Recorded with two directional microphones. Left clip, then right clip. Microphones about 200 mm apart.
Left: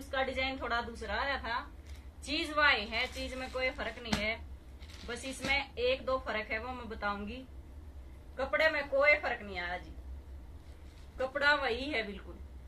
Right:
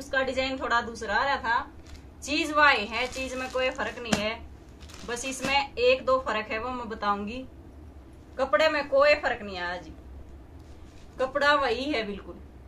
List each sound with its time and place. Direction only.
0.1 s a woman's voice: 5° right (ahead or behind)
8.4 s a woman's voice: 5° right (ahead or behind)
11.1 s a woman's voice: 5° right (ahead or behind)